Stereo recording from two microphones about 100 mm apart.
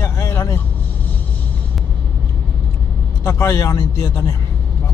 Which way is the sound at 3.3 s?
30° left (ahead or behind).